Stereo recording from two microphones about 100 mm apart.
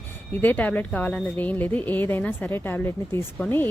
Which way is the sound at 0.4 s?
15° left (ahead or behind).